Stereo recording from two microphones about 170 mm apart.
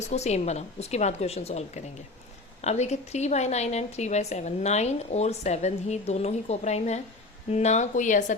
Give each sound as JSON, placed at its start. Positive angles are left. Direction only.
{"t": 0.1, "sound": "a woman's voice", "side_deg": 40}